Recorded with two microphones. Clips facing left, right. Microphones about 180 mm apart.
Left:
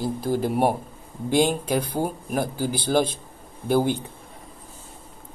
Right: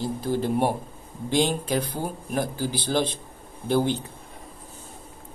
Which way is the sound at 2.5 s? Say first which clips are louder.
Left 3 dB; 10° left (ahead or behind).